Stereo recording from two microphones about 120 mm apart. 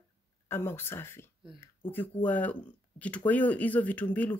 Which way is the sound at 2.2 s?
15° left (ahead or behind).